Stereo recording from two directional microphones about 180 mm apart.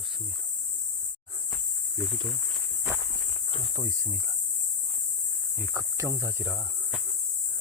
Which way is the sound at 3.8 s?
15° right (ahead or behind).